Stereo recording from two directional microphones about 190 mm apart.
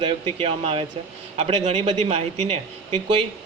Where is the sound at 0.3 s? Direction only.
30° right (ahead or behind).